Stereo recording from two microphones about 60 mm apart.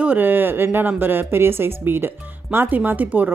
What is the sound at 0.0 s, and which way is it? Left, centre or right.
A woman's voice, right.